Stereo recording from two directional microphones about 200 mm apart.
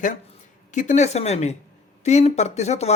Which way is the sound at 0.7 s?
40° left (ahead or behind).